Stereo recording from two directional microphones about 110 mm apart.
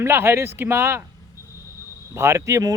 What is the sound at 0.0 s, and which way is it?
Speech, 20° right (ahead or behind).